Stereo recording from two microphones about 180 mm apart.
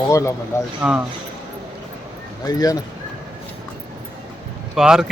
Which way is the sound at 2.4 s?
20° left (ahead or behind).